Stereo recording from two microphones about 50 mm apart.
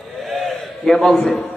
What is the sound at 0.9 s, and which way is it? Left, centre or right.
Speech, centre.